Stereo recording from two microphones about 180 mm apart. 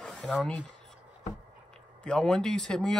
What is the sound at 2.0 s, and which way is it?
Speech, 5° left (ahead or behind).